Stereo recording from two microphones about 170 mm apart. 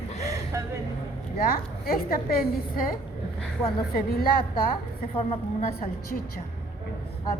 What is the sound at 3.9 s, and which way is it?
Speech, 60° left (ahead or behind).